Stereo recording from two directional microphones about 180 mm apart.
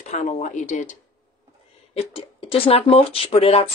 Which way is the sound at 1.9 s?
30° left (ahead or behind).